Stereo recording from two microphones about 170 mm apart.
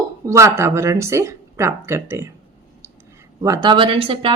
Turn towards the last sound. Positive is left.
turn(degrees=-30)  # may be behind; listen again after turning